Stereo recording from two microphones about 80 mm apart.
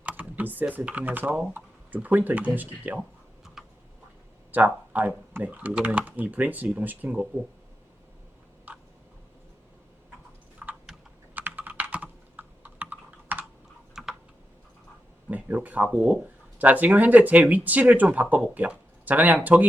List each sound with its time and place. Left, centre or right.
0.0 s computer keyboard: right
0.7 s speech: right
3.6 s a sound: centre
4.5 s speech: right
8.7 s tick: right
10.6 s typing: centre
11.3 s computer keyboard: right
13.9 s typing: centre
15.3 s speech: right